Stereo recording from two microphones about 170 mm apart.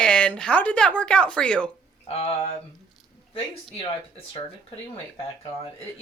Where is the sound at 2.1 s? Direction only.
35° left (ahead or behind).